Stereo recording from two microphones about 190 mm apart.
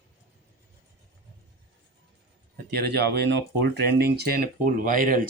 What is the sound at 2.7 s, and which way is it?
Speech, 60° right (ahead or behind).